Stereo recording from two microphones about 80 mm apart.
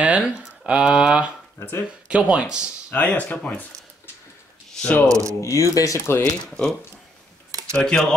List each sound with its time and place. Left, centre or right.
0.0 s speech: centre
1.6 s speech: left
2.0 s speech: centre
2.9 s speech: centre
5.0 s speech: right
5.4 s speech: left
6.4 s speech: centre
7.7 s speech: centre